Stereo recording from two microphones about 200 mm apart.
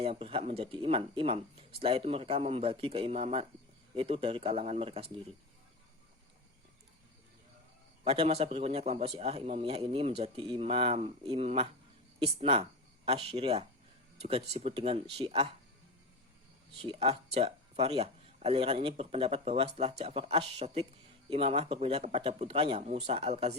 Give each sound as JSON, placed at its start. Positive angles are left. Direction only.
{"t": 0.0, "sound": "a man's voice", "side_deg": -30}
{"t": 8.0, "sound": "a man's voice", "side_deg": -30}
{"t": 16.7, "sound": "speech", "side_deg": -25}